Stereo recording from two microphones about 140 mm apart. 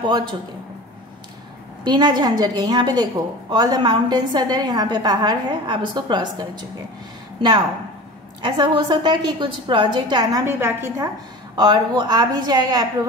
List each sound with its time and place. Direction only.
0.0 s a woman's voice: 35° right (ahead or behind)
1.9 s a woman's voice: 30° right (ahead or behind)
8.4 s a woman's voice: 35° right (ahead or behind)
10.4 s a woman's voice: 15° right (ahead or behind)
11.5 s a woman's voice: 30° right (ahead or behind)